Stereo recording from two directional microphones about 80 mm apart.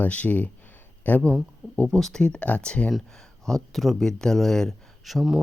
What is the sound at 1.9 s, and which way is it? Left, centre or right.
Speech, centre.